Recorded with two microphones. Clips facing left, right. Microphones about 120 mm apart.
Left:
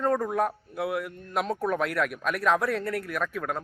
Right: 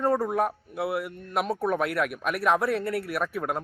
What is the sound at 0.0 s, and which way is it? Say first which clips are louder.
Speech: right 1 dB; 5° right (ahead or behind).